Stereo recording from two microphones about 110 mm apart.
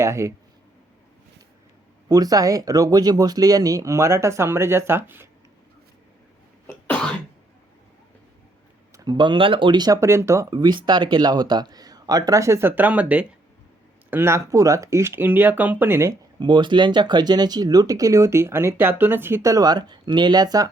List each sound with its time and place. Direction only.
0.0 s speech: 25° right (ahead or behind)
2.0 s speech: 35° right (ahead or behind)
9.0 s speech: 40° right (ahead or behind)
10.0 s speech: 25° right (ahead or behind)
16.4 s speech: 45° right (ahead or behind)